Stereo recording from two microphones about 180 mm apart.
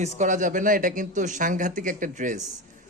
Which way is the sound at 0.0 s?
45° right (ahead or behind).